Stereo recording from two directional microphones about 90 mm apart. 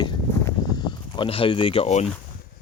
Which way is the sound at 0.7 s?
55° left (ahead or behind).